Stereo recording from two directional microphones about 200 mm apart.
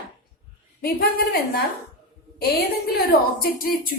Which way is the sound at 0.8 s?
50° left (ahead or behind).